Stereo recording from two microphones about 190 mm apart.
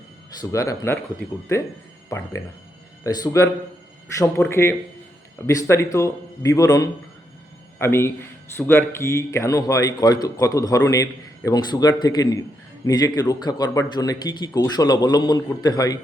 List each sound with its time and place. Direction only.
0.5 s a man's voice: 15° left (ahead or behind)